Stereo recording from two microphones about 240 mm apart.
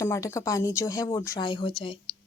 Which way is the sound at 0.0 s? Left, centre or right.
Centre.